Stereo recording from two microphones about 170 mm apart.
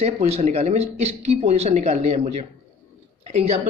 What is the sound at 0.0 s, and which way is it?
Speech, 40° right (ahead or behind).